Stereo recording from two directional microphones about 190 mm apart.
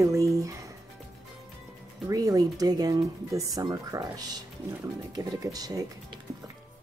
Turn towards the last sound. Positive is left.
turn(degrees=-20)  # may be behind; listen again after turning